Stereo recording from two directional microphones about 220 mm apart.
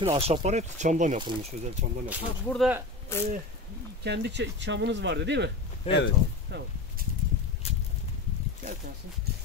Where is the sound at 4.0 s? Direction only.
50° right (ahead or behind).